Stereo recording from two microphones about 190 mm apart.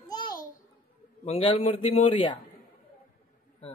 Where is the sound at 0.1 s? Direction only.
20° left (ahead or behind).